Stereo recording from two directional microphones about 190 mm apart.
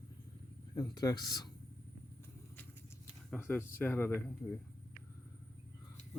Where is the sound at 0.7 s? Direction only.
20° left (ahead or behind).